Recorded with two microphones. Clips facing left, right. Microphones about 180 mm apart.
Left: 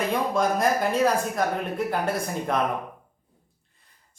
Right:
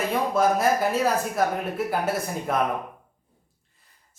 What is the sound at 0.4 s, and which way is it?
A woman's voice, 5° right (ahead or behind).